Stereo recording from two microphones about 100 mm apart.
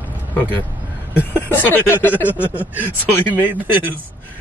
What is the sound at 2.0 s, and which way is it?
Speech, 15° right (ahead or behind).